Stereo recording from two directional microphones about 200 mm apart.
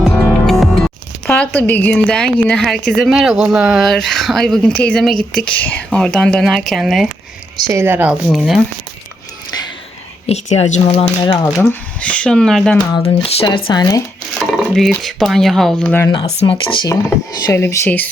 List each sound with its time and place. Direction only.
0.3 s music: centre (ahead or behind)
1.3 s a woman's voice: 10° left (ahead or behind)
7.7 s a woman's voice: 10° right (ahead or behind)
10.2 s speech: 30° left (ahead or behind)
11.6 s a woman's voice: 10° left (ahead or behind)
12.9 s speech: 20° left (ahead or behind)
14.3 s a woman's voice: centre (ahead or behind)
16.1 s speech: 25° left (ahead or behind); by 18.1 s 10° left (ahead or behind)